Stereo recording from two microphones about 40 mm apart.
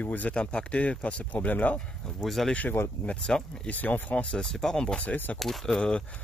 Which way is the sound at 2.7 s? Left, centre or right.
Left.